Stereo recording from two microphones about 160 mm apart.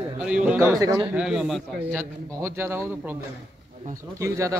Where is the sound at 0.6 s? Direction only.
20° right (ahead or behind).